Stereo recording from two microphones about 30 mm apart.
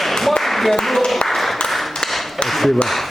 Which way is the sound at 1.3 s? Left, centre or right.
Centre.